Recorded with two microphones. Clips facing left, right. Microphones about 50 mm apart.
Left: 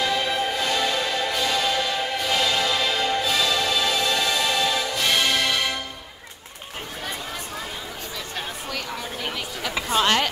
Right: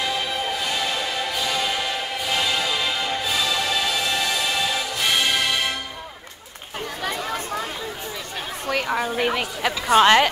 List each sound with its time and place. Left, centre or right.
0.0 s music: centre
8.8 s a sound: right
9.1 s a woman's voice: right
9.8 s speech: right